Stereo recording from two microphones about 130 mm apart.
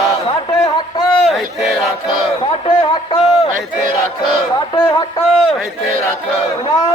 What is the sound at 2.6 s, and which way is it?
Speech, 35° left (ahead or behind).